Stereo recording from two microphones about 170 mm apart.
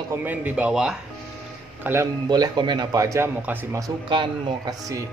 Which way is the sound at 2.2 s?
25° right (ahead or behind).